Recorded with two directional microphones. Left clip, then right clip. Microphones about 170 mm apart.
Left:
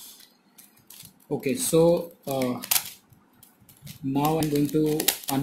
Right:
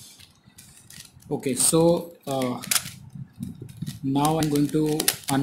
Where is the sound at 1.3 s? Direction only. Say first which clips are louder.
Even; 5° right (ahead or behind).